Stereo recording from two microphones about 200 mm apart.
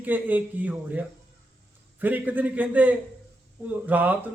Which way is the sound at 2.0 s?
10° right (ahead or behind).